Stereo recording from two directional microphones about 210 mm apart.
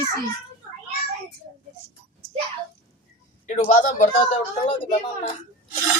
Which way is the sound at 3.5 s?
35° left (ahead or behind).